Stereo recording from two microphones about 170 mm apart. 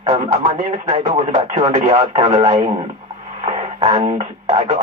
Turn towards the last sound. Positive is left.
turn(degrees=-40)  # may be behind; listen again after turning